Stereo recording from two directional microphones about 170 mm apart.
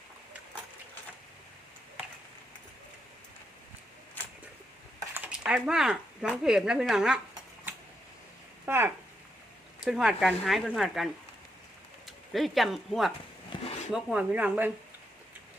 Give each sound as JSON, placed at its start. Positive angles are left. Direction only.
{"t": 5.1, "sound": "speech", "side_deg": -10}
{"t": 8.6, "sound": "speech", "side_deg": -15}
{"t": 13.5, "sound": "a sound", "side_deg": 30}
{"t": 13.9, "sound": "speech", "side_deg": -5}